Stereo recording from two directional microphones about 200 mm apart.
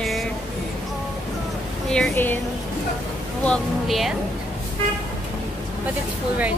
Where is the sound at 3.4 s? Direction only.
Centre (ahead or behind).